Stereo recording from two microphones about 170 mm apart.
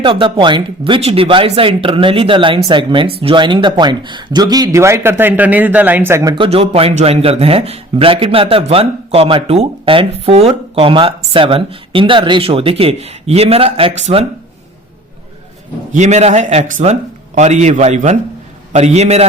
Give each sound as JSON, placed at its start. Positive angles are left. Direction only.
{"t": 0.0, "sound": "speech", "side_deg": -30}
{"t": 6.3, "sound": "speech", "side_deg": -30}
{"t": 15.9, "sound": "a man's voice", "side_deg": -45}